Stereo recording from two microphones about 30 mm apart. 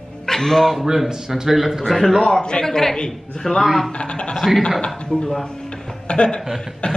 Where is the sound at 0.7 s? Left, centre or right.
Centre.